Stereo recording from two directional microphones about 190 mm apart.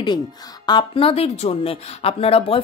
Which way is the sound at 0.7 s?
25° left (ahead or behind).